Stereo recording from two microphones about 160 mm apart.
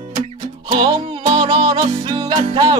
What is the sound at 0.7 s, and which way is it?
Music, 35° right (ahead or behind).